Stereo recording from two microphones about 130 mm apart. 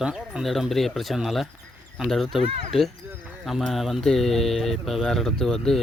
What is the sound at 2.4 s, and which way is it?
Speech, 50° right (ahead or behind).